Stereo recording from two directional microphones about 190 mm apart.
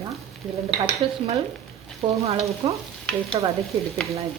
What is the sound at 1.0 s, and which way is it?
Speech, 25° right (ahead or behind).